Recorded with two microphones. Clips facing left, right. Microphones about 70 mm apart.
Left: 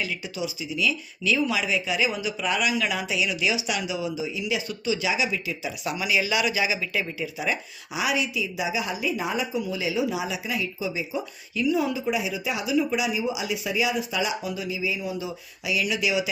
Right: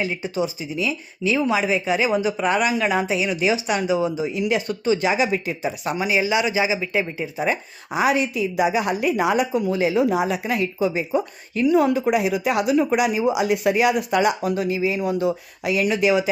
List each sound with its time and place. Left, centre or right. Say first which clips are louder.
0.0 s speech: right 7 dB; right